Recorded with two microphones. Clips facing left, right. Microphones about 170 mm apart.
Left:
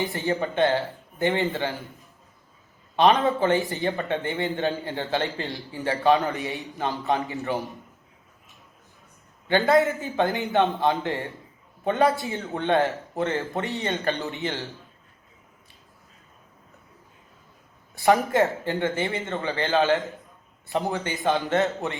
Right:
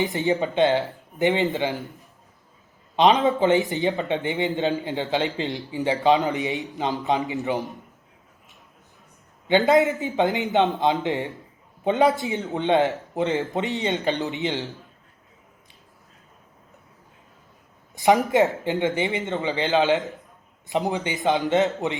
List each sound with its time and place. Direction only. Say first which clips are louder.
0.0 s speech: right 3 dB; 20° right (ahead or behind)
2.9 s a man's voice: right 1 dB; 15° right (ahead or behind)
9.5 s a man's voice: right 2 dB; 20° right (ahead or behind)
17.9 s a man's voice: right 2 dB; 15° right (ahead or behind)